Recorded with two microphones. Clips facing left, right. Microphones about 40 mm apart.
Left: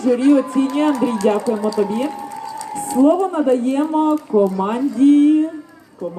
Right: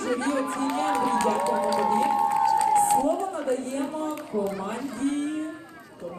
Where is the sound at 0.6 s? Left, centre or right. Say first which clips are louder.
Left 10 dB; left.